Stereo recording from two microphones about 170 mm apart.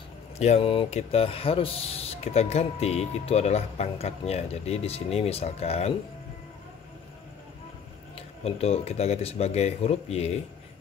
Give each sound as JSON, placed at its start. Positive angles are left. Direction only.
{"t": 0.4, "sound": "speech", "side_deg": 35}
{"t": 8.5, "sound": "speech", "side_deg": 35}